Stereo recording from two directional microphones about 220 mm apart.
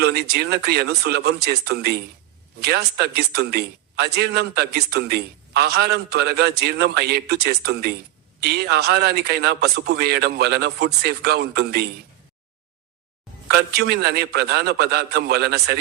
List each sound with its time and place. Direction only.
0.0 s a man's voice: 45° right (ahead or behind)
13.6 s a man's voice: 45° right (ahead or behind)